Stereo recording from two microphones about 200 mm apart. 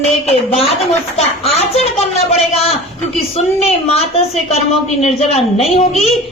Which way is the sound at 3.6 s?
30° left (ahead or behind).